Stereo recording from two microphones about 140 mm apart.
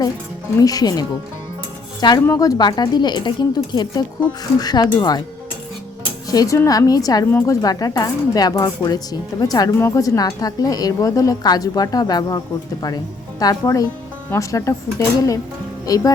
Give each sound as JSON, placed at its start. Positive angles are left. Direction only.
{"t": 0.6, "sound": "a woman's voice", "side_deg": 25}
{"t": 6.2, "sound": "speech", "side_deg": 25}
{"t": 13.4, "sound": "speech", "side_deg": 25}